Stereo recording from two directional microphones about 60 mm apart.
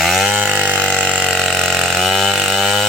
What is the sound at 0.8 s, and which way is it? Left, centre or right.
Vehicle, centre.